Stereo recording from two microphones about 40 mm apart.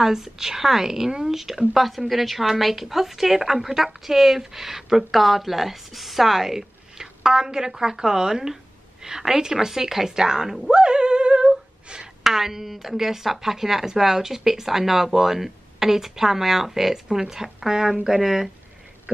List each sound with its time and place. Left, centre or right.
0.0 s a woman's voice: centre
10.7 s a sound: right
12.2 s a woman's voice: centre